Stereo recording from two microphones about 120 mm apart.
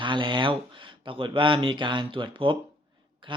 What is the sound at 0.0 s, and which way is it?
Speech, 45° right (ahead or behind).